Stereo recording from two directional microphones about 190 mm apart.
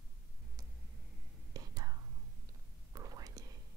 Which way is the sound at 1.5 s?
20° right (ahead or behind).